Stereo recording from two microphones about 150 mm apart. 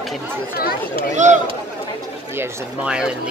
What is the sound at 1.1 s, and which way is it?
Speech, 55° right (ahead or behind).